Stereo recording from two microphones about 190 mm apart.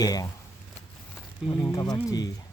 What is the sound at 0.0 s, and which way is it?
Speech, 20° left (ahead or behind).